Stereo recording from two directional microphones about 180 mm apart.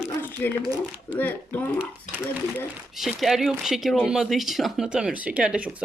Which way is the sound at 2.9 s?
Centre (ahead or behind).